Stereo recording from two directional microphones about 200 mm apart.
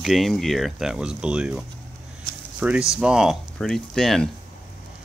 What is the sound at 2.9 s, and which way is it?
Speech, 5° right (ahead or behind).